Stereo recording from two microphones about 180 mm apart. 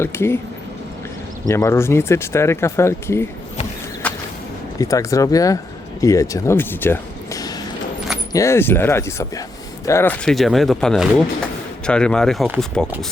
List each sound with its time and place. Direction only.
0.0 s speech: 15° left (ahead or behind)
1.5 s speech: 15° left (ahead or behind)
4.0 s whip: 10° left (ahead or behind)
4.8 s speech: 20° left (ahead or behind)